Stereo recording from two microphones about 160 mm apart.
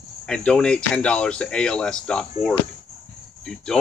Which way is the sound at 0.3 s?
5° left (ahead or behind).